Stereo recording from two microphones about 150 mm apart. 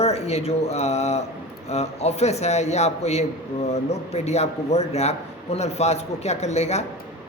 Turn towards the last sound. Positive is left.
turn(degrees=45)  # may be behind; listen again after turning